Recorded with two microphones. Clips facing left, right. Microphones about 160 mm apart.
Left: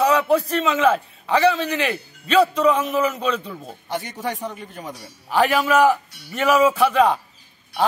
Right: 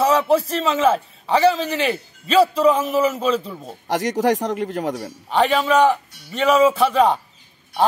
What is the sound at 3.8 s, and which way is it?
Speech, 90° right.